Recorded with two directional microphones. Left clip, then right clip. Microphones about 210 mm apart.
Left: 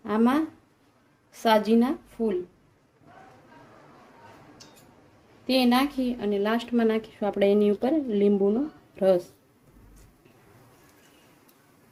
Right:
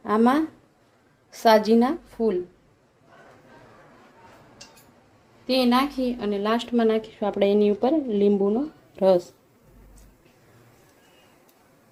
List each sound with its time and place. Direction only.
0.0 s a woman's voice: 10° right (ahead or behind)
5.5 s a woman's voice: 5° left (ahead or behind)